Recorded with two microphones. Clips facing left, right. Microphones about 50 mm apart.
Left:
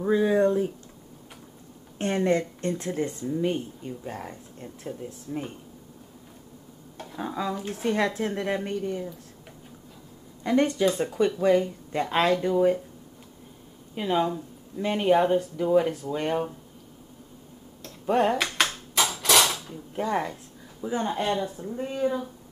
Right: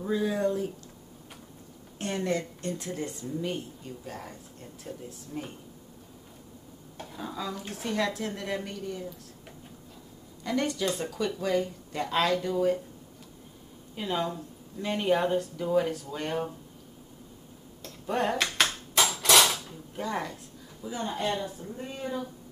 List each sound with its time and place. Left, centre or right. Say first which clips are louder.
0.0 s speech: left 6 dB; left
2.0 s speech: left 6 dB; left
7.2 s speech: left 6 dB; left
7.5 s speech: left 7 dB; centre
7.9 s speech: left 4 dB; left
10.4 s speech: left 6 dB; left
13.9 s speech: left 5 dB; centre
18.0 s dishes: left 5 dB; centre
20.0 s speech: left 5 dB; centre
21.3 s speech: left 4 dB; centre